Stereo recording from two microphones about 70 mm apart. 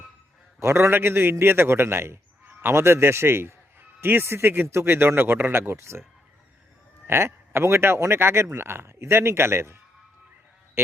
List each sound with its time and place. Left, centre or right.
0.6 s a man's voice: right
7.1 s a man's voice: right